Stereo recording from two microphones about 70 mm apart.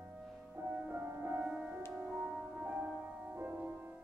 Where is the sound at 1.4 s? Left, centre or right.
Centre.